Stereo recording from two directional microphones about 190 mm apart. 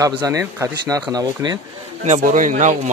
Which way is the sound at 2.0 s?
40° right (ahead or behind).